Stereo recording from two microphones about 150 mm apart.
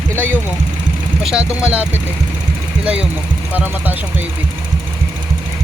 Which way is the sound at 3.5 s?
10° right (ahead or behind).